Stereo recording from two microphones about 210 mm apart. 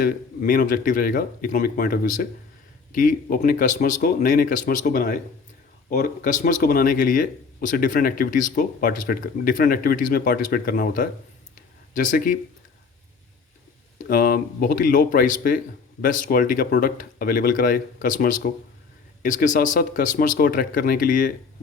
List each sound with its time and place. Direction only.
0.0 s speech: 45° left (ahead or behind)
14.1 s speech: 45° left (ahead or behind)